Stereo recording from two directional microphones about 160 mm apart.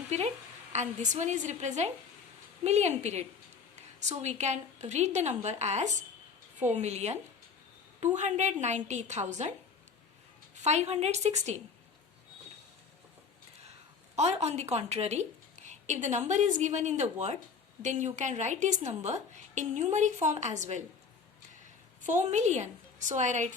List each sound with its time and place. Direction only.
0.7 s a woman's voice: 45° right (ahead or behind)
14.2 s a woman's voice: 45° right (ahead or behind)
22.0 s a woman's voice: 50° right (ahead or behind)